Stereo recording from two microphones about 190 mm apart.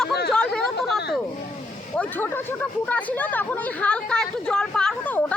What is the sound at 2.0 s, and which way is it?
Speech, 10° left (ahead or behind).